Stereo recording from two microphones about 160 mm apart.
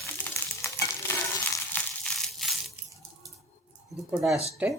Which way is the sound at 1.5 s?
10° left (ahead or behind).